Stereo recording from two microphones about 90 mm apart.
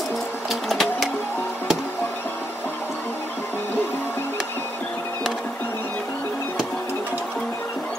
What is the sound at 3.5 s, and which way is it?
Music, 25° left (ahead or behind).